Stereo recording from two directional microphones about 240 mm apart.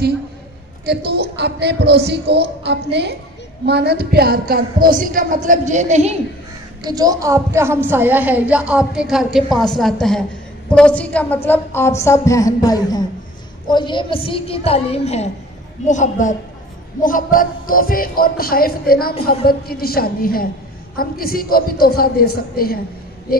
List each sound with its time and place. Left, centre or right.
0.8 s a woman's voice: right
6.8 s a woman's voice: centre; by 22.8 s left